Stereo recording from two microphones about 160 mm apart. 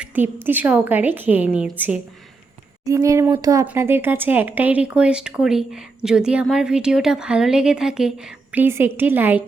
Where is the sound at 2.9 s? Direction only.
20° right (ahead or behind).